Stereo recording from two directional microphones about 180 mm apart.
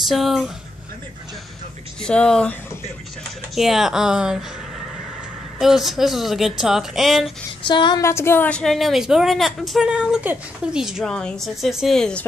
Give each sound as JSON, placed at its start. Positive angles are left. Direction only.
{"t": 0.1, "sound": "a woman's voice", "side_deg": 0}
{"t": 2.0, "sound": "a woman's voice", "side_deg": 5}
{"t": 3.5, "sound": "a woman's voice", "side_deg": 0}
{"t": 5.6, "sound": "a woman's voice", "side_deg": 0}
{"t": 7.6, "sound": "speech", "side_deg": 25}
{"t": 8.0, "sound": "a woman's voice", "side_deg": 15}